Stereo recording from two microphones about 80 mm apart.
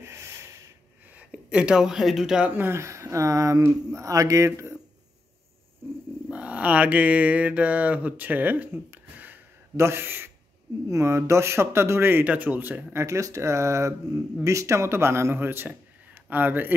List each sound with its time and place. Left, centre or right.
0.0 s snort: right
1.1 s speech: centre
2.5 s speech: right
6.3 s a sound: centre
9.8 s speech: right
13.0 s speech: right